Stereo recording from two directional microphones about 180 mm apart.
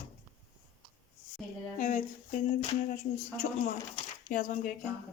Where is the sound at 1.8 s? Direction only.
45° left (ahead or behind).